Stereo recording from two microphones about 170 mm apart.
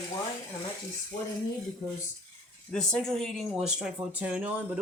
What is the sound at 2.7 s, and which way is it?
Speech, 5° left (ahead or behind).